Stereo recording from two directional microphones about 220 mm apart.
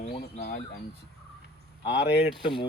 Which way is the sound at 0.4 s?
50° left (ahead or behind).